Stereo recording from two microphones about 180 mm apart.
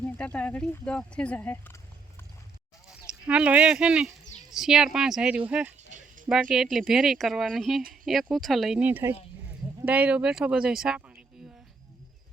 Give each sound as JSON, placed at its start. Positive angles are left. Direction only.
{"t": 0.2, "sound": "speech", "side_deg": 5}
{"t": 2.9, "sound": "speech", "side_deg": -5}
{"t": 5.9, "sound": "a sound", "side_deg": -45}
{"t": 6.2, "sound": "speech", "side_deg": -5}